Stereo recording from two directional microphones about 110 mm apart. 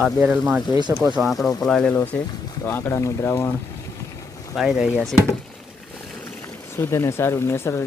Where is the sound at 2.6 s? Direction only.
20° left (ahead or behind).